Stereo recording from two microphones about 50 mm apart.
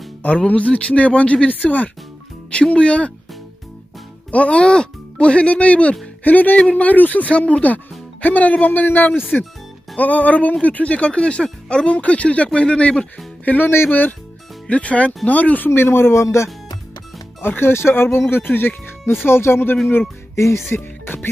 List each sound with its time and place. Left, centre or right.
0.5 s speech: left
4.3 s speech: left
14.7 s speech: left
15.7 s speech: left
16.2 s speech: left
17.4 s speech: left
20.3 s speech: left
21.0 s music: left